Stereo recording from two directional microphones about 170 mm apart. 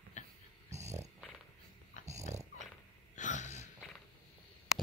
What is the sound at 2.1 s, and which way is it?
Dog, 40° right (ahead or behind).